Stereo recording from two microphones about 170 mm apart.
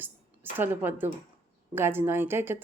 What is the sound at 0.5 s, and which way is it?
Speech, 10° right (ahead or behind).